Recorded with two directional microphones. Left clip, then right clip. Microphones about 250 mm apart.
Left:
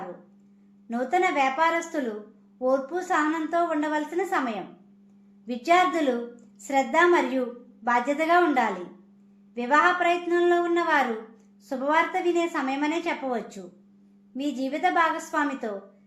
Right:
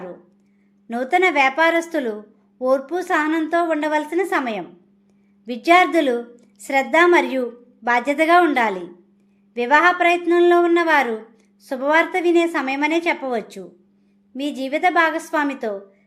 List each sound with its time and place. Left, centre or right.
0.9 s a woman's voice: right